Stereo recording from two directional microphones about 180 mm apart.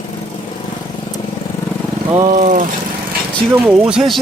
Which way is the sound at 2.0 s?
25° right (ahead or behind).